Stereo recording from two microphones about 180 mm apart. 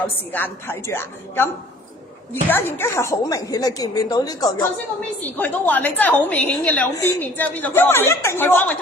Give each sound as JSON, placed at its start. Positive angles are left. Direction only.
{"t": 0.3, "sound": "a woman's voice", "side_deg": 10}
{"t": 5.4, "sound": "a woman's voice", "side_deg": 10}